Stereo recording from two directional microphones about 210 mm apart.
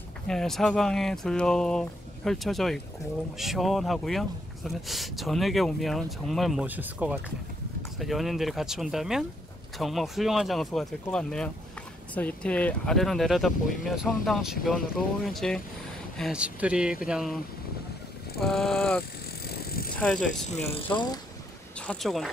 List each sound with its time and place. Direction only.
0.3 s speech: centre (ahead or behind)
18.4 s speech: centre (ahead or behind)
19.4 s bicycle: 45° left (ahead or behind)
19.9 s speech: 5° left (ahead or behind)
20.4 s speech: 30° left (ahead or behind)
21.7 s speech: 5° left (ahead or behind)